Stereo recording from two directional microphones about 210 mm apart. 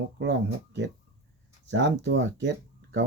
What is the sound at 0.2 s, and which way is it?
Speech, 60° right (ahead or behind).